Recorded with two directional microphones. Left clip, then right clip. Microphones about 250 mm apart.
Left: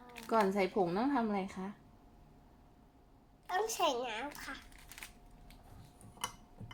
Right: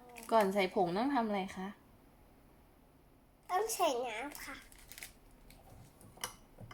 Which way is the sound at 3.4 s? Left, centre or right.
Centre.